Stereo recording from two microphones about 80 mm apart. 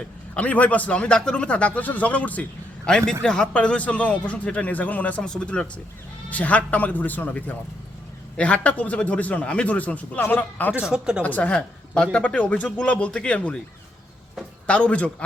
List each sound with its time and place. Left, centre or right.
0.3 s speech: centre
10.8 s a woman's voice: centre
11.2 s speech: centre
14.7 s speech: centre